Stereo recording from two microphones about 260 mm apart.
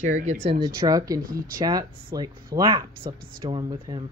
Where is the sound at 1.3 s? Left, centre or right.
Right.